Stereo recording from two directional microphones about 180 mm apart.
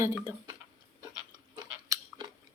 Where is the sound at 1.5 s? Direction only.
20° right (ahead or behind).